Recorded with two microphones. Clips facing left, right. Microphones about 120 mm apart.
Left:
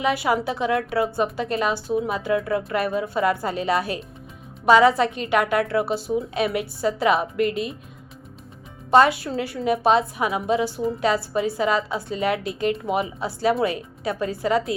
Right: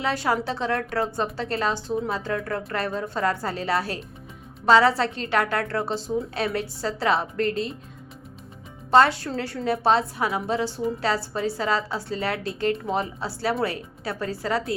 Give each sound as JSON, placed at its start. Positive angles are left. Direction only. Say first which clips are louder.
{"t": 0.0, "sound": "a woman's voice", "louder": "left 3 dB", "side_deg": 15}
{"t": 8.9, "sound": "a woman's voice", "louder": "left 2 dB", "side_deg": 15}